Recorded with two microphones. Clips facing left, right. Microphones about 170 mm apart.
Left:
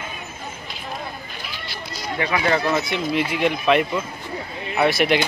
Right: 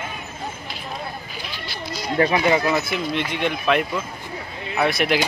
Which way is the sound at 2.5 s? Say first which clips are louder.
Right 1 dB; 5° right (ahead or behind).